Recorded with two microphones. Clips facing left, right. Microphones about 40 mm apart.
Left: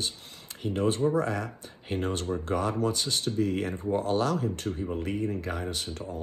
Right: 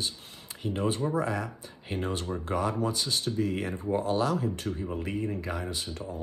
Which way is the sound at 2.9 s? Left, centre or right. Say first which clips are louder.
Left 1 dB; left.